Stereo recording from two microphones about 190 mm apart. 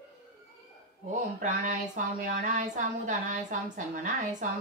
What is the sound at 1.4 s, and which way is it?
A woman's voice, 45° right (ahead or behind).